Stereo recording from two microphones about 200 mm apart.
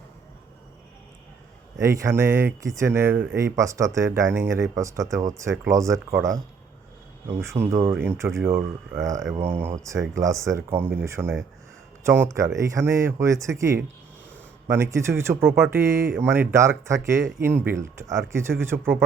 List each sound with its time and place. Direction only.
1.8 s speech: 15° right (ahead or behind)